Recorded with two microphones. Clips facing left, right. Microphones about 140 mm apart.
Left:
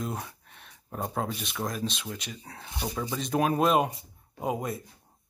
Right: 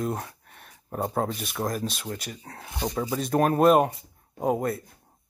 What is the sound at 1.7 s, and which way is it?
Speech, 50° right (ahead or behind).